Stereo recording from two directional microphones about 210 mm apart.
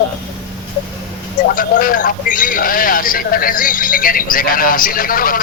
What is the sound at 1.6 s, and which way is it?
Speech, 40° left (ahead or behind).